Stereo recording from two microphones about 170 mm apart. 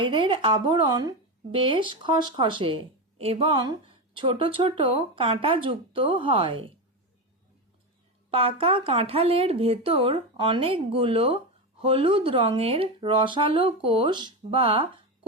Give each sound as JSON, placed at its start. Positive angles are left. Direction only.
{"t": 0.0, "sound": "speech", "side_deg": -30}
{"t": 8.3, "sound": "speech", "side_deg": -35}